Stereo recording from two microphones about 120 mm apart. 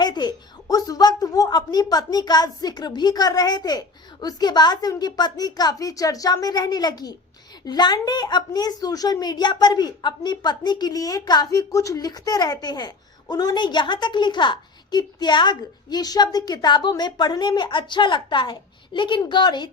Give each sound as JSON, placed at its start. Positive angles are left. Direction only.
{"t": 0.0, "sound": "a woman's voice", "side_deg": 35}